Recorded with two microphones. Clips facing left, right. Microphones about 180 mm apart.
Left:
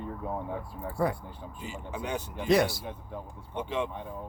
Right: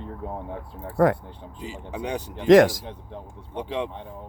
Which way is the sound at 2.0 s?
35° right (ahead or behind).